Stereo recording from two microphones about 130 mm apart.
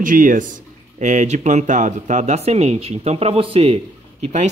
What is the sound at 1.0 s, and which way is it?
Speech, 65° right (ahead or behind).